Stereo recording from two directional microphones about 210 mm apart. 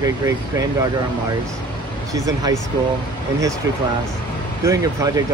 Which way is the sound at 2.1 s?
15° right (ahead or behind).